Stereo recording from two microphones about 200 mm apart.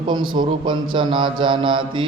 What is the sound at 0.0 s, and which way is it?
A man's voice, 25° right (ahead or behind).